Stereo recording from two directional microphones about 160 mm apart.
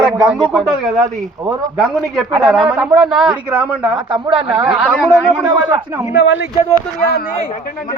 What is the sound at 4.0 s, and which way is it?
A man's voice, 30° right (ahead or behind).